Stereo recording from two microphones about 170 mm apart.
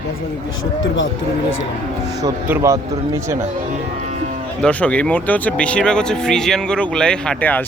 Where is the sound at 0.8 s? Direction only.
90° left.